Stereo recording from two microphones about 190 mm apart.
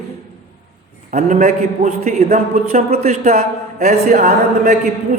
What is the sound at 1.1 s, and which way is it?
A man's voice, 40° right (ahead or behind).